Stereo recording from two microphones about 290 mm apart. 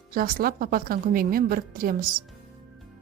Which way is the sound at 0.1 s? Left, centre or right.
Right.